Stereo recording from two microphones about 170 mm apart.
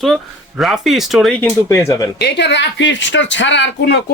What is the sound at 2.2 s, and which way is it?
Speech, 90° left.